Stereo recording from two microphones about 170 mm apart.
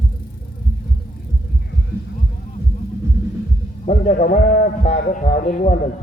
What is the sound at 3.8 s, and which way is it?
A man's voice, 45° left (ahead or behind).